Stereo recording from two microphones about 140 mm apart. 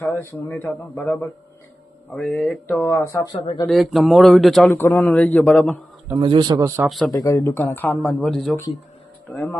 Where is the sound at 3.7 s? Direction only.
Centre (ahead or behind).